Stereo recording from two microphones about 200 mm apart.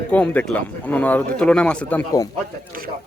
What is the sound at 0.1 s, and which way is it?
Speech, 5° left (ahead or behind).